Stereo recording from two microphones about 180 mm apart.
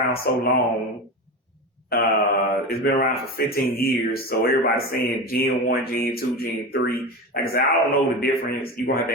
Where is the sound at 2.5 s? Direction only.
55° left (ahead or behind).